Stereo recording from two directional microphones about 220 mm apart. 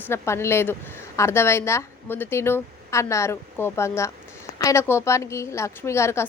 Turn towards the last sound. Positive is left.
turn(degrees=10)  # may be behind; listen again after turning